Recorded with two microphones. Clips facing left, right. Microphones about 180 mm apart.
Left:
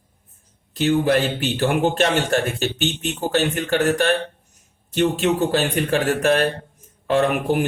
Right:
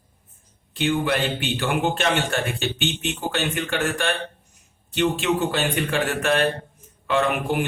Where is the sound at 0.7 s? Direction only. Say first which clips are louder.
Left 5 dB; 40° left (ahead or behind).